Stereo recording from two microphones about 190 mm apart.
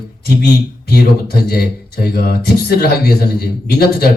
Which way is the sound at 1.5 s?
55° left (ahead or behind).